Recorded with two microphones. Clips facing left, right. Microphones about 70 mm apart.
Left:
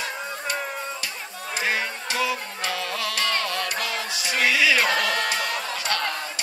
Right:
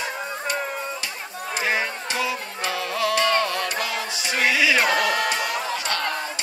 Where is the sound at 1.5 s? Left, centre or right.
Right.